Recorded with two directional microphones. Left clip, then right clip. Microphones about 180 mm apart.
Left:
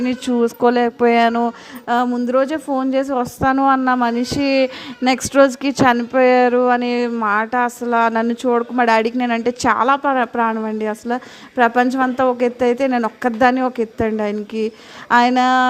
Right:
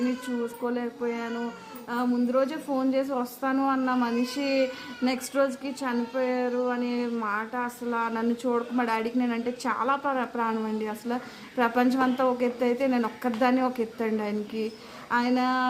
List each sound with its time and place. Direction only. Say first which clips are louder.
0.3 s speech: left 15 dB; 50° left (ahead or behind)
2.1 s a woman's voice: left 9 dB; 40° left (ahead or behind)